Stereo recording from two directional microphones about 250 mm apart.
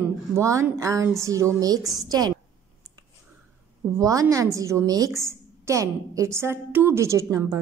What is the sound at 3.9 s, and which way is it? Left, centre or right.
A woman's voice, centre.